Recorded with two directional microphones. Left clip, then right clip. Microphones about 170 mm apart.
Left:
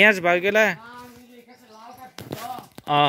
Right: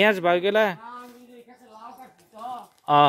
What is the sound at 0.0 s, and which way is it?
Speech, 5° right (ahead or behind).